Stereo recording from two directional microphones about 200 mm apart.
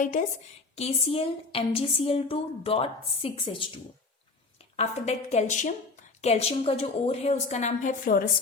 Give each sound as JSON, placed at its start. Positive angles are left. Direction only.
{"t": 0.0, "sound": "a woman's voice", "side_deg": 40}